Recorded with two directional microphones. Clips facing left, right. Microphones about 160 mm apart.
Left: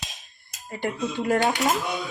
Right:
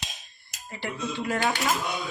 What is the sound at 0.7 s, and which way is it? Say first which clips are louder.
Speech: left 4 dB; 50° left (ahead or behind).